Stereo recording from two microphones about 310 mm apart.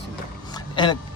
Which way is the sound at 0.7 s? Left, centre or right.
Centre.